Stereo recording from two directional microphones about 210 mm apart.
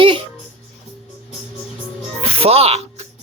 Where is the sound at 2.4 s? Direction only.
30° right (ahead or behind).